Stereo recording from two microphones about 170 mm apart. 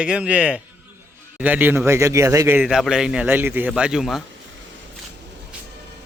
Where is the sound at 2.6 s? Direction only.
5° right (ahead or behind).